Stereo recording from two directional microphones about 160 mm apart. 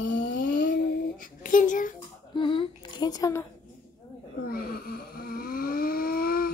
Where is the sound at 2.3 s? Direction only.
30° left (ahead or behind).